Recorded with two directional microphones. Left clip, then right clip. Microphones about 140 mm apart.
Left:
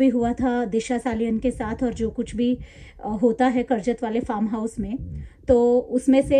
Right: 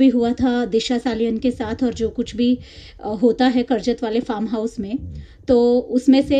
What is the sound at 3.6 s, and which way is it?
A woman's voice, 45° right (ahead or behind).